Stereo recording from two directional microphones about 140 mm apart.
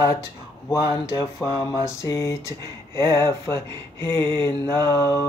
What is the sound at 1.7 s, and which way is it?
Speech, 20° left (ahead or behind).